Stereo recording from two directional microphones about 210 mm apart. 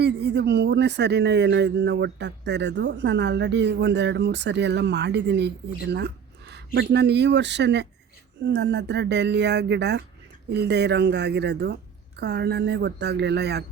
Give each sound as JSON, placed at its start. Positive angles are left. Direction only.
{"t": 0.0, "sound": "a woman's voice", "side_deg": -50}